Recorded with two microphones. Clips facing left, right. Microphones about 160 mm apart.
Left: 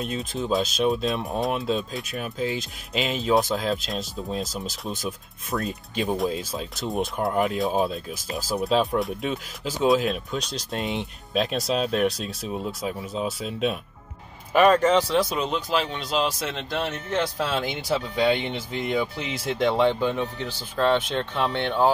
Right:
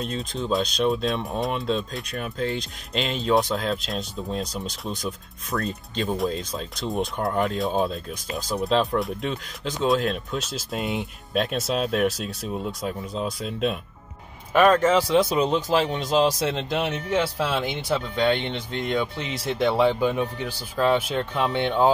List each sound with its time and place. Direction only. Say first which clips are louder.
0.0 s speech: even; centre (ahead or behind)
15.1 s speech: right 3 dB; 25° right (ahead or behind)
15.4 s speech: right 4 dB; 40° right (ahead or behind)
16.7 s speech: even; 15° right (ahead or behind)
21.5 s speech: right 2 dB; 15° right (ahead or behind)